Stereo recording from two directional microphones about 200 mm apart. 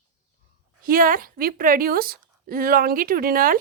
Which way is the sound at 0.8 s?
45° right (ahead or behind).